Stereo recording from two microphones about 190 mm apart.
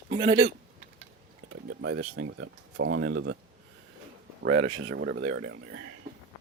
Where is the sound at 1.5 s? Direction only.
90° right.